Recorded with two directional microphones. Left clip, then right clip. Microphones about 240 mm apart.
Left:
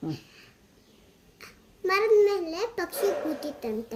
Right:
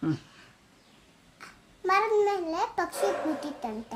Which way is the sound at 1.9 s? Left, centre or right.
Centre.